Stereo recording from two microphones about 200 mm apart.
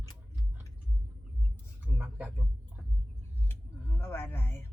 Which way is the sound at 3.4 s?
10° left (ahead or behind).